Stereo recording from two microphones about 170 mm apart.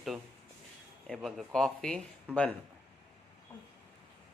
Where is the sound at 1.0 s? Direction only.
Centre (ahead or behind).